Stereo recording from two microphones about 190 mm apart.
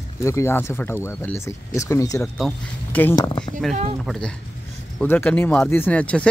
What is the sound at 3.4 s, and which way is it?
Speech, centre (ahead or behind).